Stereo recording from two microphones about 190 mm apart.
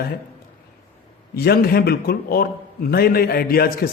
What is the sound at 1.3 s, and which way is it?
A man's voice, 55° left (ahead or behind).